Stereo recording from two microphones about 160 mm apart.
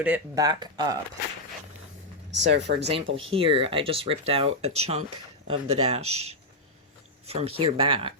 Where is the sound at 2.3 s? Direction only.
90° right.